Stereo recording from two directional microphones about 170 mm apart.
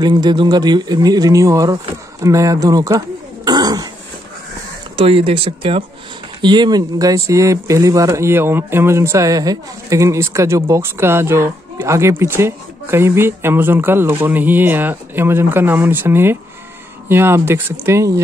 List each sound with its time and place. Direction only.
0.0 s speech: 25° right (ahead or behind)
3.4 s throat clearing: 25° right (ahead or behind)
4.9 s speech: 35° right (ahead or behind); by 18.2 s 15° right (ahead or behind)